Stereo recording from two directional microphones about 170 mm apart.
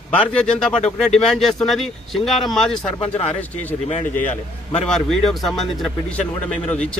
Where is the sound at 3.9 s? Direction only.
45° left (ahead or behind).